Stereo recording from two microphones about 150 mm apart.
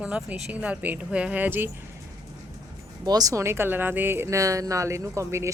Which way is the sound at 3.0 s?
25° right (ahead or behind).